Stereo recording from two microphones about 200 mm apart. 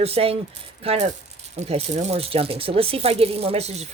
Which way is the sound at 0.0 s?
30° right (ahead or behind).